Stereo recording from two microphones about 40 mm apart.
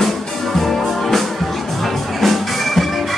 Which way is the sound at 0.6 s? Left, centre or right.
Centre.